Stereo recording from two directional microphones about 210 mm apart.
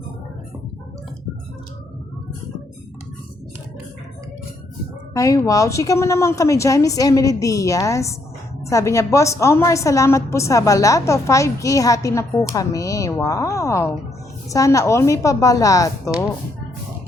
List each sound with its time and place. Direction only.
5.1 s a woman's voice: 15° left (ahead or behind)